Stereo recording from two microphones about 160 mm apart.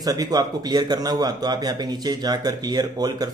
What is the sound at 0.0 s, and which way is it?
A man's voice, 25° right (ahead or behind).